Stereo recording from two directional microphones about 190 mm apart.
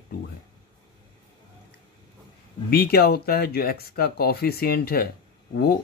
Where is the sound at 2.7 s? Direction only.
55° left (ahead or behind).